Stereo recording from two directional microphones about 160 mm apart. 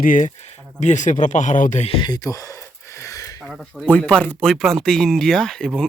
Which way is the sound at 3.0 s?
20° left (ahead or behind).